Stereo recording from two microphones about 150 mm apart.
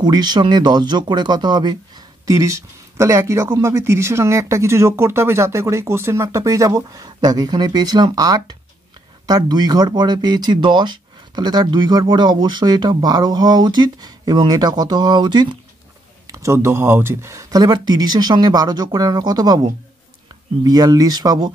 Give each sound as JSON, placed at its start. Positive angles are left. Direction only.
{"t": 0.0, "sound": "speech", "side_deg": -30}
{"t": 16.3, "sound": "speech", "side_deg": -20}